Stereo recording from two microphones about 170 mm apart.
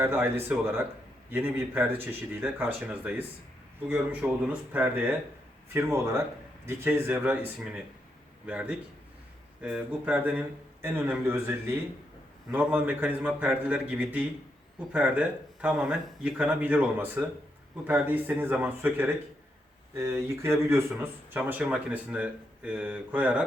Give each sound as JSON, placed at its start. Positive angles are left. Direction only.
{"t": 0.0, "sound": "speech", "side_deg": -10}